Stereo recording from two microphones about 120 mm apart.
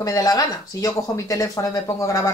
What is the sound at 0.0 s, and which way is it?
Speech, 30° left (ahead or behind).